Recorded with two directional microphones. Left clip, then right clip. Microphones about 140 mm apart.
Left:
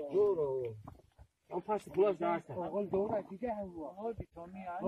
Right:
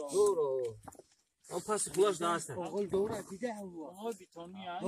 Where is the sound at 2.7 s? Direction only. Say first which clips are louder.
Even; 5° right (ahead or behind).